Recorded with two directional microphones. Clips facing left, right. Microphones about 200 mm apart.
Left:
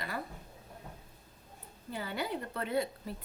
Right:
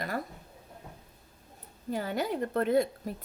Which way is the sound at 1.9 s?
45° right (ahead or behind).